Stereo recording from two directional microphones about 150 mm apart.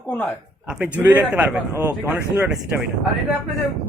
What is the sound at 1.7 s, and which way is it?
Speech, 20° right (ahead or behind).